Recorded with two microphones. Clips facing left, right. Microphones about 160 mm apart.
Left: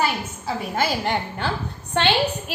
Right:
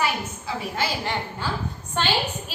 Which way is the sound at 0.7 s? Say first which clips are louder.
Left 5 dB; 60° left (ahead or behind).